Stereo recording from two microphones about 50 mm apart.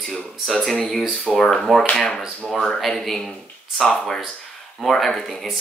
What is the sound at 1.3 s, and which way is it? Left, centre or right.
Speech, centre.